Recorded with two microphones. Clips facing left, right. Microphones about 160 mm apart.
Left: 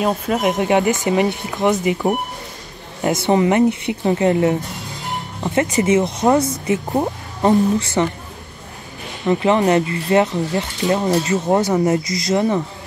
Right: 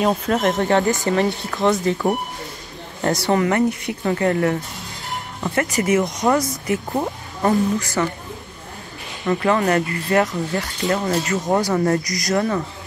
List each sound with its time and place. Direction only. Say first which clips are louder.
0.0 s speech: even; 5° left (ahead or behind)
3.2 s speech: left 4 dB; 20° left (ahead or behind)
9.2 s speech: left 3 dB; 20° left (ahead or behind)